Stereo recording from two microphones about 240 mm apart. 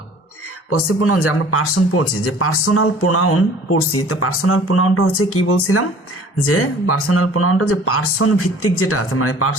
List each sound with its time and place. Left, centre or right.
0.7 s speech: left